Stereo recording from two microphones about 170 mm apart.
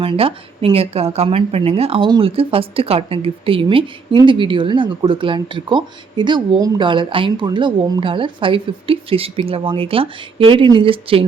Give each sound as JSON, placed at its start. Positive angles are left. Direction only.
{"t": 0.0, "sound": "speech", "side_deg": -30}